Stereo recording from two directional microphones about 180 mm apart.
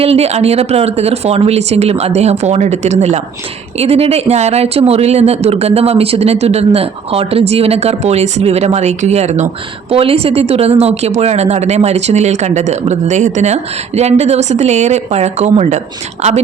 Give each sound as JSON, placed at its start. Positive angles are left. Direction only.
{"t": 0.0, "sound": "speech", "side_deg": -35}